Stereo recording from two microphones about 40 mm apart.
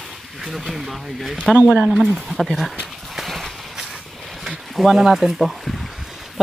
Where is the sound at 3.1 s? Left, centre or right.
Centre.